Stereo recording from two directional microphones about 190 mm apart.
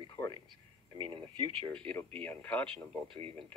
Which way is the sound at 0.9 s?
25° right (ahead or behind).